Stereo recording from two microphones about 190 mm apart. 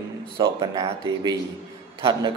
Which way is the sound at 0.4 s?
20° right (ahead or behind).